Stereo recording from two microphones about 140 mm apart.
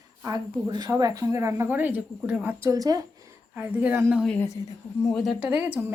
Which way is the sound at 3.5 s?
10° right (ahead or behind).